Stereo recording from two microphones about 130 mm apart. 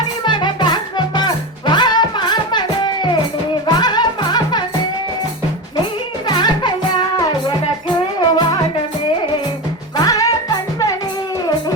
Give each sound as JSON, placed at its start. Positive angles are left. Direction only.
{"t": 0.3, "sound": "music", "side_deg": 35}
{"t": 6.2, "sound": "music", "side_deg": 35}
{"t": 8.2, "sound": "music", "side_deg": 35}
{"t": 10.0, "sound": "music", "side_deg": 30}